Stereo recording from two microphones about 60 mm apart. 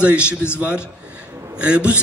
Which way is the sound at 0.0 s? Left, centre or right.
Right.